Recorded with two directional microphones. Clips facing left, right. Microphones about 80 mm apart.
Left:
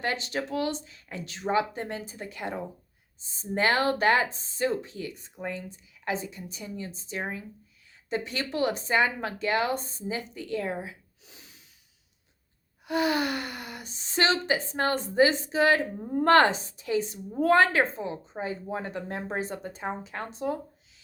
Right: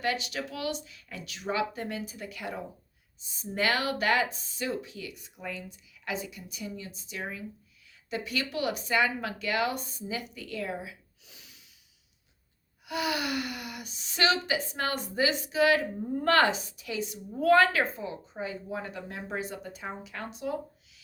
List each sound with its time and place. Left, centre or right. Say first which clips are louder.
0.0 s a woman's voice: left 1 dB; left
12.8 s a woman's voice: left 5 dB; left